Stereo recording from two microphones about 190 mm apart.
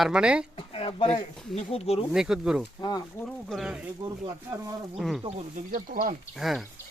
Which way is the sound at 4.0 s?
20° right (ahead or behind).